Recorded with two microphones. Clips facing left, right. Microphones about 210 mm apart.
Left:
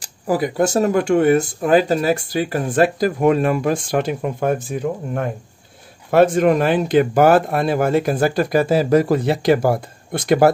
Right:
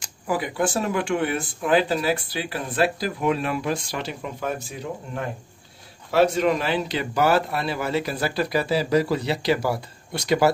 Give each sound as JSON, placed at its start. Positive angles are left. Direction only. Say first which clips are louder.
{"t": 0.0, "sound": "speech", "louder": "left 7 dB", "side_deg": 40}